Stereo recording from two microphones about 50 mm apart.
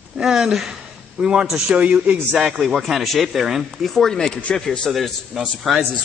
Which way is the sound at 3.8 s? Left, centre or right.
Centre.